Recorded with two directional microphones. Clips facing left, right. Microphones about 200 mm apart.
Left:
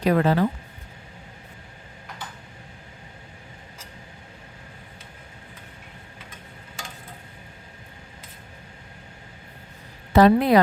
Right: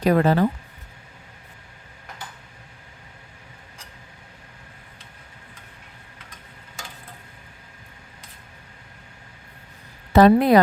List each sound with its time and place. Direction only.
0.0 s speech: 40° right (ahead or behind)
10.2 s speech: 45° right (ahead or behind)